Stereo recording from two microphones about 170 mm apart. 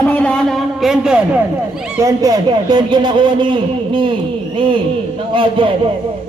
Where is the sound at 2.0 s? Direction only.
20° right (ahead or behind).